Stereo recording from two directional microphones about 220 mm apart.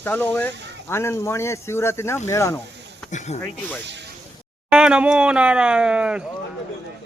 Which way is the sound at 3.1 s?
30° left (ahead or behind).